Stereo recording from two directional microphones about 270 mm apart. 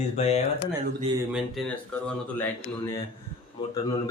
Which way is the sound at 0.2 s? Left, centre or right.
Left.